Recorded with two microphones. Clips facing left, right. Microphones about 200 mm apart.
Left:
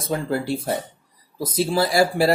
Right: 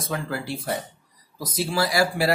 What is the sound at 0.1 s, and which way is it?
Speech, 30° left (ahead or behind).